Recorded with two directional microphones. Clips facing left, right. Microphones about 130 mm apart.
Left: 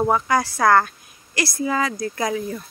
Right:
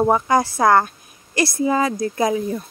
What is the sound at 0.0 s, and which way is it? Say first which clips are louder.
A woman's voice: right 3 dB; 20° right (ahead or behind).